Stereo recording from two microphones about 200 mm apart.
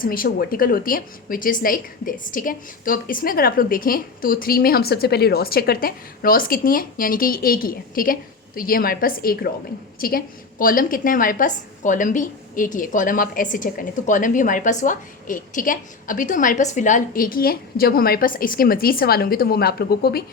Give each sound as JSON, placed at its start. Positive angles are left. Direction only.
{"t": 0.0, "sound": "a woman's voice", "side_deg": 45}